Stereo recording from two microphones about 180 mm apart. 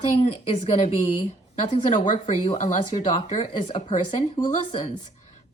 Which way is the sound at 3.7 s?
25° left (ahead or behind).